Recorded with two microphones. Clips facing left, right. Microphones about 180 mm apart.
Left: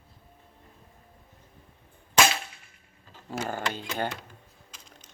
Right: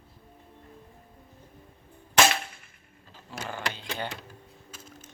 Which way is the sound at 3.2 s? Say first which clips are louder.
Left 4 dB; 45° left (ahead or behind).